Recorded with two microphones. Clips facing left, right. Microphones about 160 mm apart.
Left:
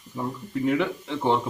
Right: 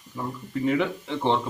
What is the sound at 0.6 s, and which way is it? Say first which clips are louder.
Speech: even; centre (ahead or behind).